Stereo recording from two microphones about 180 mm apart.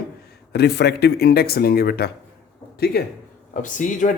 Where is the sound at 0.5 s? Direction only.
65° left (ahead or behind).